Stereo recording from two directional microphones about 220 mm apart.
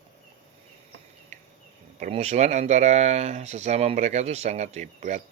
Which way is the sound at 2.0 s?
30° right (ahead or behind).